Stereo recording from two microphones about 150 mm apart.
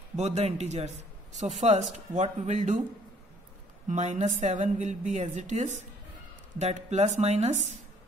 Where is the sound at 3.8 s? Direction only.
50° right (ahead or behind).